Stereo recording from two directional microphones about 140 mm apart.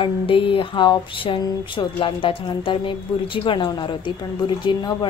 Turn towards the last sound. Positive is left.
turn(degrees=35)  # may be behind; listen again after turning